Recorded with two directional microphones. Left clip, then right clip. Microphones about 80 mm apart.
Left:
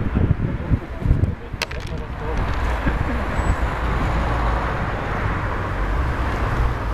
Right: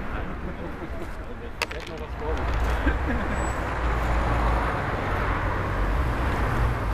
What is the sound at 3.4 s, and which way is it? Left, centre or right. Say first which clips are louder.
Vehicle: left 3 dB; left.